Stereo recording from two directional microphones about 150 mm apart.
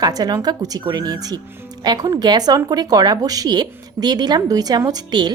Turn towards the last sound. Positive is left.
turn(degrees=-30)  # may be behind; listen again after turning